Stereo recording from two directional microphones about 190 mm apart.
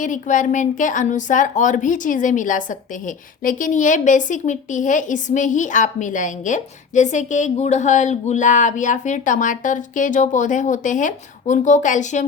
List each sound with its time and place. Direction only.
0.0 s a woman's voice: 40° left (ahead or behind)